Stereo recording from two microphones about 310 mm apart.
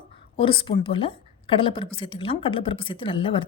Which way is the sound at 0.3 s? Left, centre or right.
Centre.